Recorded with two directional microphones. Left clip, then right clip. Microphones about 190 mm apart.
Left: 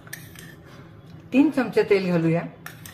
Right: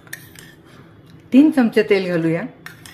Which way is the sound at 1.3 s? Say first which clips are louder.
Right 7 dB; 35° right (ahead or behind).